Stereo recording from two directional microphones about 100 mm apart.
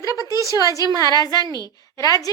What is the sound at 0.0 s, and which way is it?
A woman's voice, 35° left (ahead or behind).